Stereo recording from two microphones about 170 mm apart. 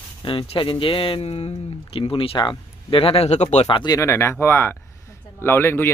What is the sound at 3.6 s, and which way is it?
Speech, 25° left (ahead or behind).